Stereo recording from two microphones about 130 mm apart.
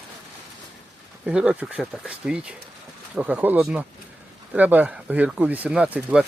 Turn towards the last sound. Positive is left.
turn(degrees=-10)  # may be behind; listen again after turning